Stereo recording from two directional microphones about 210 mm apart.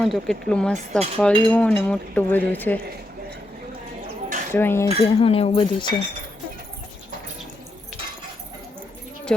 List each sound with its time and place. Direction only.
0.0 s cutlery: centre (ahead or behind)
4.5 s cutlery: 10° left (ahead or behind)
5.0 s speech: 25° left (ahead or behind)